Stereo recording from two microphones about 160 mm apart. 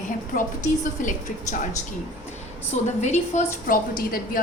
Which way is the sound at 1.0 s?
55° left (ahead or behind).